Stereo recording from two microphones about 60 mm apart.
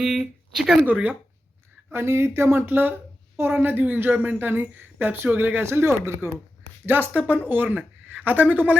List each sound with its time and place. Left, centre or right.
0.0 s a sound: centre
0.8 s speech: right
1.9 s a woman's voice: right
5.8 s speech: right
6.8 s a woman's voice: right
7.1 s speech: right